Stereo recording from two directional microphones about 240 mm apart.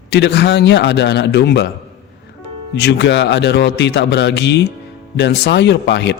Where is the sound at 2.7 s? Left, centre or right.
Left.